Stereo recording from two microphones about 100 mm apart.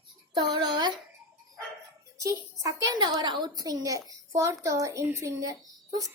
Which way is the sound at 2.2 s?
35° right (ahead or behind).